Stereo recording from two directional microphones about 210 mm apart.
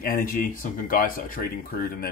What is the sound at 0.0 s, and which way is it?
Speech, 40° left (ahead or behind).